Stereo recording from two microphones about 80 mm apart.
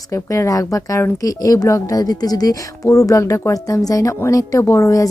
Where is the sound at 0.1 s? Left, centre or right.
Left.